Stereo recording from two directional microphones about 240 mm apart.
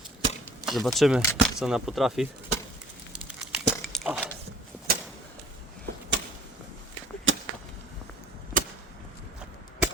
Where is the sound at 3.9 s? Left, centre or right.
Centre.